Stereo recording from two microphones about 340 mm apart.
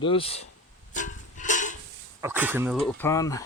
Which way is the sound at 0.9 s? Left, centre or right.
Left.